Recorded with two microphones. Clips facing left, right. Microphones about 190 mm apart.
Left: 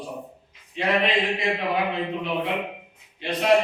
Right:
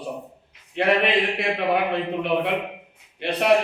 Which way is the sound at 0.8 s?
65° right (ahead or behind).